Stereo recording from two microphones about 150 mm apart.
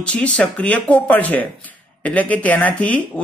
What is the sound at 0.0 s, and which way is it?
Speech, 5° left (ahead or behind).